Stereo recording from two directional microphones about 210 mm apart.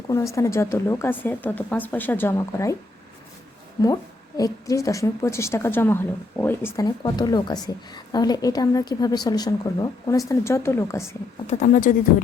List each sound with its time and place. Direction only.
0.3 s a woman's voice: 15° left (ahead or behind)
4.4 s a woman's voice: 15° left (ahead or behind)
11.4 s speech: 35° left (ahead or behind)